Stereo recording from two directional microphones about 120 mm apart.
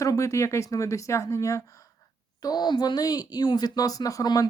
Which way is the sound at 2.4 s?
35° left (ahead or behind).